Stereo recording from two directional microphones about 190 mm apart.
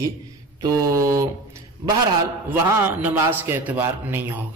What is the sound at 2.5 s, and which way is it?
A man's voice, 10° right (ahead or behind).